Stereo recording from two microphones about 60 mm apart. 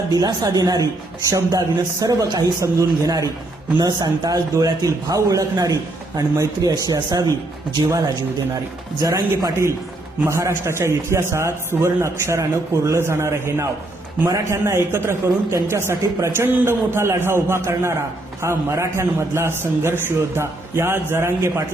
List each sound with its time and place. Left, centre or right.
0.1 s speech: right
1.3 s a man's voice: right
10.2 s a man's voice: right
14.3 s a man's voice: right
14.8 s a man's voice: right